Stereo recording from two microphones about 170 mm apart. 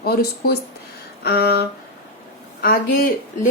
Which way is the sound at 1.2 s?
70° left (ahead or behind).